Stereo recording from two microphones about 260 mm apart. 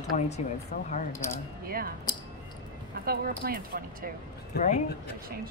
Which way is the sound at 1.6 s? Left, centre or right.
Right.